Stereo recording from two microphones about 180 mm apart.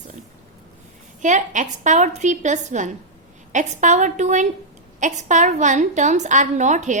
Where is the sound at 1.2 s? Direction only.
45° right (ahead or behind).